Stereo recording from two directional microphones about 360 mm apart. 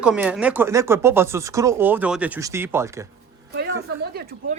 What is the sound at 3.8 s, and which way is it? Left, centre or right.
Speech, right.